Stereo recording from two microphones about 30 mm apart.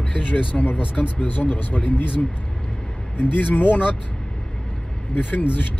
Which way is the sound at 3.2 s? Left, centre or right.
Left.